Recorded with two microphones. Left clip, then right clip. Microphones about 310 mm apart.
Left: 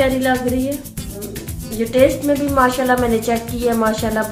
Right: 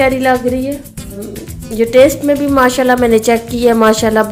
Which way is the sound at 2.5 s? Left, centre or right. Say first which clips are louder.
Right 4 dB; right.